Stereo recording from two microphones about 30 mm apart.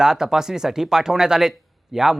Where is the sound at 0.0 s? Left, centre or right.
Centre.